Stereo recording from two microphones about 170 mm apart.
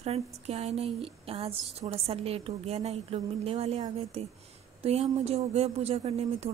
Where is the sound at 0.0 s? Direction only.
40° right (ahead or behind).